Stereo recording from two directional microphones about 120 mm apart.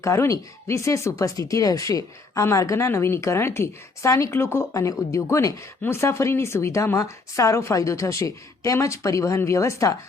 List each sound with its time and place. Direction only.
0.0 s speech: 25° left (ahead or behind)